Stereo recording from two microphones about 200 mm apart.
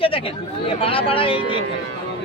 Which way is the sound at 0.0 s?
25° left (ahead or behind).